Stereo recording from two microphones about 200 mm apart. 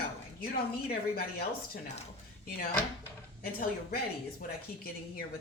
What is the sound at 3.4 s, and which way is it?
Speech, 45° left (ahead or behind).